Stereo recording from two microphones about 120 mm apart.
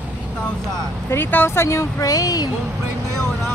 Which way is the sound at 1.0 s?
20° left (ahead or behind).